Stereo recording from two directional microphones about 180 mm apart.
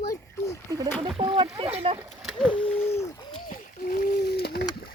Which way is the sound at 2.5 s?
35° left (ahead or behind).